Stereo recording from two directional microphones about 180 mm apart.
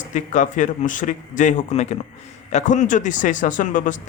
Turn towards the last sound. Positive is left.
turn(degrees=45)  # may be behind; listen again after turning